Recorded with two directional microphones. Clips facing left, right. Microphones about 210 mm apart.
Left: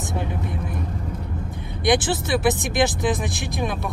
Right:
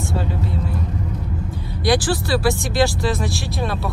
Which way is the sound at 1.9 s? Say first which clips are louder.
Right 1 dB; 20° left (ahead or behind).